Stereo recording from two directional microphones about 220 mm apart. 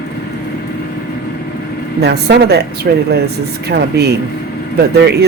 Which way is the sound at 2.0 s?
50° right (ahead or behind).